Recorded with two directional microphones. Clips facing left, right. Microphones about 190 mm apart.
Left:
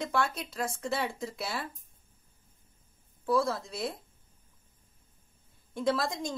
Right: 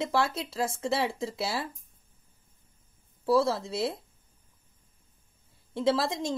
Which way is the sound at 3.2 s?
25° right (ahead or behind).